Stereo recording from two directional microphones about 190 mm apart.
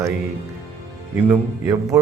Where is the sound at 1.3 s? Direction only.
15° right (ahead or behind).